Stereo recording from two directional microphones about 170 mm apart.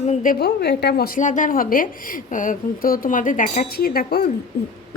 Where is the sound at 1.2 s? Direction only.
50° left (ahead or behind); by 4.3 s 65° left (ahead or behind).